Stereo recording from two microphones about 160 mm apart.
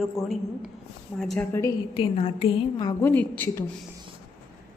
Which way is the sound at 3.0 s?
10° left (ahead or behind).